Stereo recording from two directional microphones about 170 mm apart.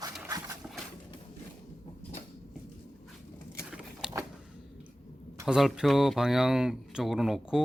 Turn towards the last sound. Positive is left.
turn(degrees=0)  # may be behind; listen again after turning